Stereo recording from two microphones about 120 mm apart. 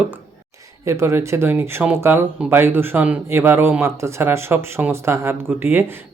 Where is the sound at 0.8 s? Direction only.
25° right (ahead or behind).